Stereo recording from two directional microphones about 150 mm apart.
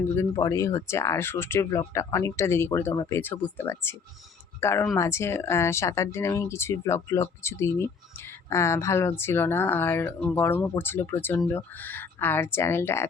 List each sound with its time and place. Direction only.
0.2 s speech: 20° left (ahead or behind)